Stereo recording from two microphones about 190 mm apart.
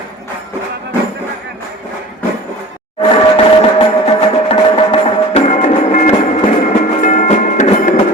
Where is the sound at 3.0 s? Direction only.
30° left (ahead or behind).